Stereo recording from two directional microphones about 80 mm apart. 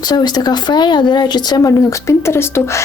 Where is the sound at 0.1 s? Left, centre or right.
Left.